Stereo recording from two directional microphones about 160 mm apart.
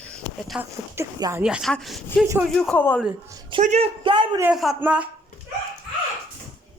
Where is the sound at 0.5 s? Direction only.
10° right (ahead or behind).